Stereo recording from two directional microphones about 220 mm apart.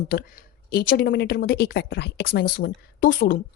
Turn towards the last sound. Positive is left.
turn(degrees=40)  # may be behind; listen again after turning